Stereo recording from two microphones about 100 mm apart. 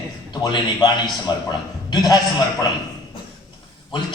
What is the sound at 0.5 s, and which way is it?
A man's voice, 45° left (ahead or behind).